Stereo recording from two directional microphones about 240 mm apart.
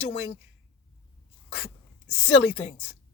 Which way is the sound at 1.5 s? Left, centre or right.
Left.